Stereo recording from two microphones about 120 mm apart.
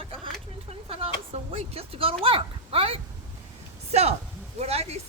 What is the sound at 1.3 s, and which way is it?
Speech, 55° right (ahead or behind).